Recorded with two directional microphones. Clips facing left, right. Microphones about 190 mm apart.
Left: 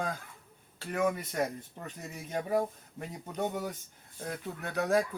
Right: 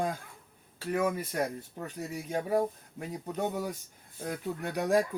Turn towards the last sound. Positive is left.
turn(degrees=-15)  # may be behind; listen again after turning